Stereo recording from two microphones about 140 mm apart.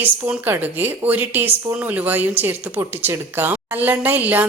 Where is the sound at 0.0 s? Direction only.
15° right (ahead or behind).